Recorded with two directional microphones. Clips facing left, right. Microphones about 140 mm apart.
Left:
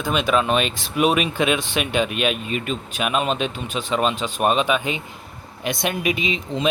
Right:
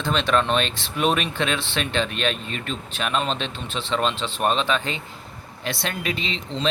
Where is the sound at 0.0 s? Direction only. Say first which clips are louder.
Left 1 dB; 10° left (ahead or behind).